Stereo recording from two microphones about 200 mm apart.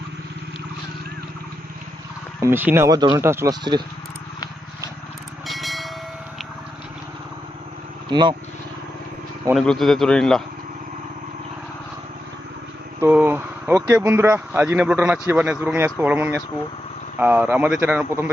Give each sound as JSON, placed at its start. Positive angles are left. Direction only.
{"t": 2.4, "sound": "speech", "side_deg": -10}
{"t": 5.5, "sound": "vehicle", "side_deg": 0}
{"t": 8.1, "sound": "speech", "side_deg": -25}
{"t": 9.6, "sound": "a man's voice", "side_deg": 0}
{"t": 13.0, "sound": "speech", "side_deg": -10}